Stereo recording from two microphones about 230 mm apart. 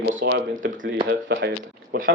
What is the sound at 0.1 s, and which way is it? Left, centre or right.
Speech, right.